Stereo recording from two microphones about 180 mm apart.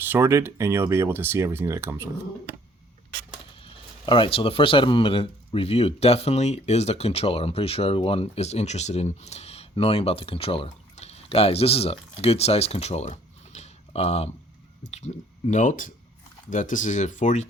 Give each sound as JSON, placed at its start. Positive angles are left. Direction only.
{"t": 0.0, "sound": "speech", "side_deg": -10}
{"t": 3.6, "sound": "speech", "side_deg": 30}